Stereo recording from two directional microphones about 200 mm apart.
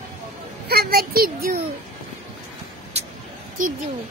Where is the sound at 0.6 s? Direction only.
50° right (ahead or behind).